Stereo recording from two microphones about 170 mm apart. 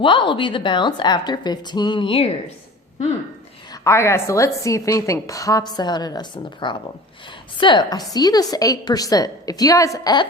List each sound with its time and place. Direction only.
0.0 s a woman's voice: 30° left (ahead or behind)
3.7 s a woman's voice: 15° left (ahead or behind)